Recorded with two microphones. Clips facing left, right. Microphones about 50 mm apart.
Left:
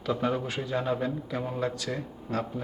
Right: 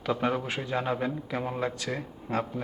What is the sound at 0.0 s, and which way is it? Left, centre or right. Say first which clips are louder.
A man's voice: even; centre.